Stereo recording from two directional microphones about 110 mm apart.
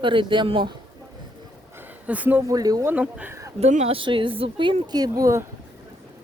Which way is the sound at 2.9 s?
15° right (ahead or behind).